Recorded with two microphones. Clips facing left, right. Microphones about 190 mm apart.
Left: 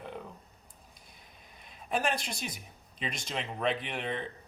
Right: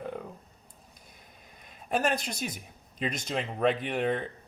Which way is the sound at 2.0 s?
40° right (ahead or behind).